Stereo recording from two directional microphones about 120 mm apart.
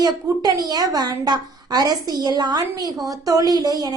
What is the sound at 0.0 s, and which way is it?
A woman's voice, 35° right (ahead or behind).